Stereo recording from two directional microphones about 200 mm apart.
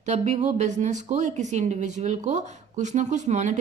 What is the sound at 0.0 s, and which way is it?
Speech, 35° right (ahead or behind).